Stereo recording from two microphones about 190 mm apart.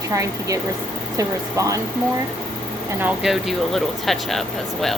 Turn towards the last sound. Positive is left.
turn(degrees=0)  # may be behind; listen again after turning